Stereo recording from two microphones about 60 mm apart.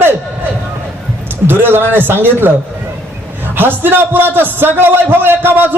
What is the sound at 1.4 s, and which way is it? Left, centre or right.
A man's voice, right.